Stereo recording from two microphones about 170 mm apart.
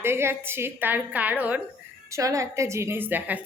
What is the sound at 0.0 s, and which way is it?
A woman's voice, 15° right (ahead or behind).